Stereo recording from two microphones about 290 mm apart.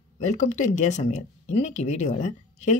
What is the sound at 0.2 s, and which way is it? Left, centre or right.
Speech, left.